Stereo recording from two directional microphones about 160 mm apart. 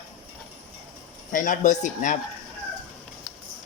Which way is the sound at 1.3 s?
55° left (ahead or behind).